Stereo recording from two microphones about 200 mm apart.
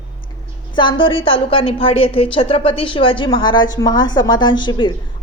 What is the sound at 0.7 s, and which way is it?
A woman's voice, 25° left (ahead or behind).